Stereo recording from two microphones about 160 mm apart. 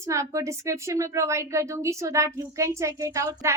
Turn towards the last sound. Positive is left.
turn(degrees=-20)  # may be behind; listen again after turning